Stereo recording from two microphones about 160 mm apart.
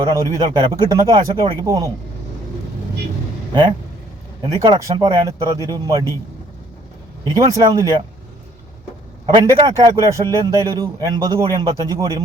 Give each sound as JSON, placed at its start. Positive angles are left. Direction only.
{"t": 0.0, "sound": "a man's voice", "side_deg": -25}
{"t": 4.4, "sound": "a man's voice", "side_deg": -25}
{"t": 7.3, "sound": "a man's voice", "side_deg": -25}
{"t": 9.3, "sound": "a man's voice", "side_deg": -25}